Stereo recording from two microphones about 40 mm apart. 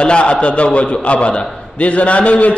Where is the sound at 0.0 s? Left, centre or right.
Left.